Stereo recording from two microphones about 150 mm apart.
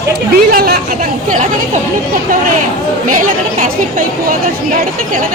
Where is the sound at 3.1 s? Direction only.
65° right (ahead or behind).